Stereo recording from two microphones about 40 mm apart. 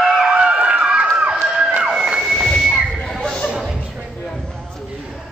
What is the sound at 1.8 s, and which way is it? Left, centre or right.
Music, centre.